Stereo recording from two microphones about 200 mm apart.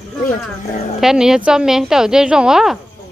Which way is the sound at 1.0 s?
Centre (ahead or behind).